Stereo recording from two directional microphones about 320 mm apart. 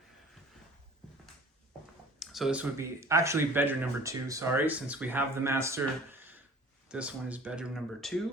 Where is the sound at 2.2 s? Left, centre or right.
Centre.